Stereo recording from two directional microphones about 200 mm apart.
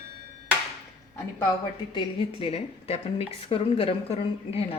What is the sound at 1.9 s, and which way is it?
A woman's voice, 30° left (ahead or behind).